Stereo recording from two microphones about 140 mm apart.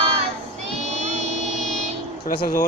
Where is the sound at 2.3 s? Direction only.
80° left.